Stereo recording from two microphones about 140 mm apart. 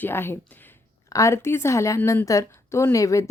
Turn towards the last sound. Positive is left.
turn(degrees=25)  # may be behind; listen again after turning